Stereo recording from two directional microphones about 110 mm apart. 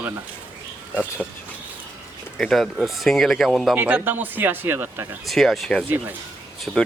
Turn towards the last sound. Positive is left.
turn(degrees=-15)  # may be behind; listen again after turning